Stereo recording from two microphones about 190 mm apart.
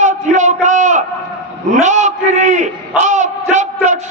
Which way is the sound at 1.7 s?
40° right (ahead or behind).